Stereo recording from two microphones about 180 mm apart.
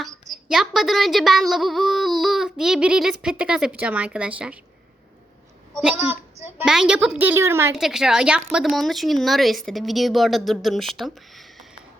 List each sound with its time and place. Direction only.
0.4 s speech: centre (ahead or behind)
5.7 s a child's voice: 5° right (ahead or behind)
7.8 s speech: centre (ahead or behind)